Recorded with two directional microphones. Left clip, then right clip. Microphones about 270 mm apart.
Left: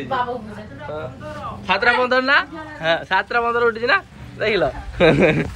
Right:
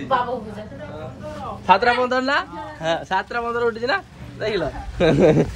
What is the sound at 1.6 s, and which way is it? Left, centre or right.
A man's voice, centre.